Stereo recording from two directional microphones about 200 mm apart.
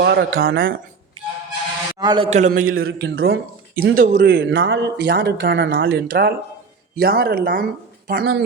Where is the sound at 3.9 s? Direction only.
45° right (ahead or behind).